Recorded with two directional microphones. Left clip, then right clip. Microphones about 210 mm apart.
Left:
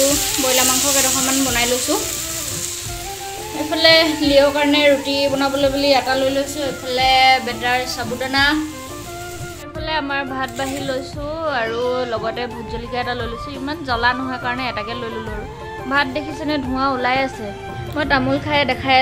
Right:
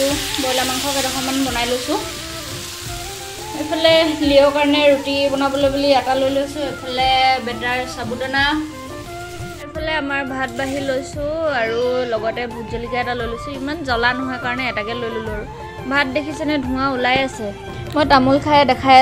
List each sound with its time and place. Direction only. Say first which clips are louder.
0.6 s speech: left 2 dB; 5° left (ahead or behind)
3.7 s speech: left 1 dB; centre (ahead or behind)
9.8 s a woman's voice: even; 5° right (ahead or behind)
17.9 s a woman's voice: right 5 dB; 20° right (ahead or behind)